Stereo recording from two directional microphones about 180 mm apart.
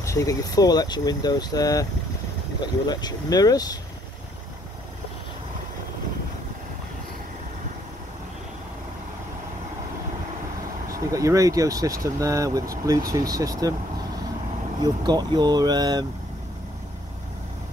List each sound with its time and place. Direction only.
0.0 s speech: 15° left (ahead or behind)
10.9 s speech: 20° right (ahead or behind)
14.8 s speech: 25° right (ahead or behind)